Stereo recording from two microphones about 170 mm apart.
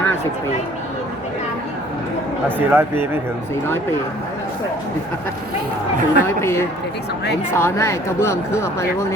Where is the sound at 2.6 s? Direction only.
10° right (ahead or behind).